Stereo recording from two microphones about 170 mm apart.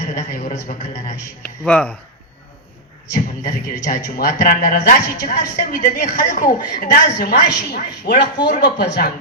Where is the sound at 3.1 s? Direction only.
55° left (ahead or behind).